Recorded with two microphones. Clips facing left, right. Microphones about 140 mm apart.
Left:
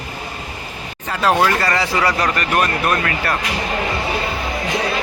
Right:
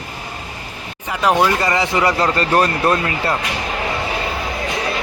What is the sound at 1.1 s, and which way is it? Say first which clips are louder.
Speech: right 1 dB; 15° right (ahead or behind).